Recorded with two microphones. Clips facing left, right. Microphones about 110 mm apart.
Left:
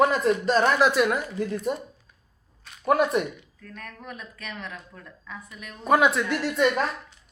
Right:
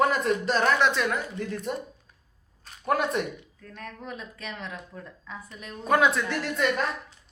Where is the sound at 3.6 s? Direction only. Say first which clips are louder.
Right 1 dB; 25° right (ahead or behind).